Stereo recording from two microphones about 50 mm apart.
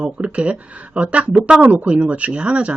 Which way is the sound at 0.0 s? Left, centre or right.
Right.